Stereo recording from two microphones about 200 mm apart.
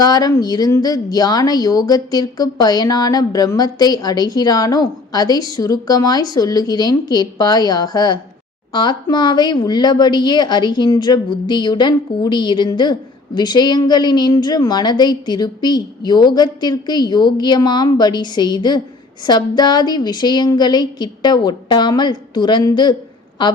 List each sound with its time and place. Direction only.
0.0 s a woman's voice: 20° left (ahead or behind)